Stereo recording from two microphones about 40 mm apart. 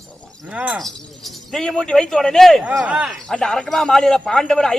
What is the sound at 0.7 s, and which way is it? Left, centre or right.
Speech, centre.